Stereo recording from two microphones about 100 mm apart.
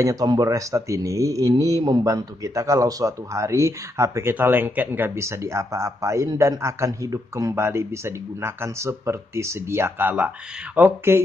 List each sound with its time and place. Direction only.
0.0 s speech: 35° right (ahead or behind)